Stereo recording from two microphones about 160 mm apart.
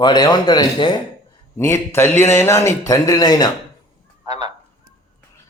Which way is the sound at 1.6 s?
15° left (ahead or behind).